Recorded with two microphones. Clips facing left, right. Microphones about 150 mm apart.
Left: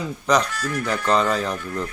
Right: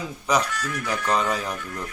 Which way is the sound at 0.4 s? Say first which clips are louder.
Left 3 dB; 35° left (ahead or behind).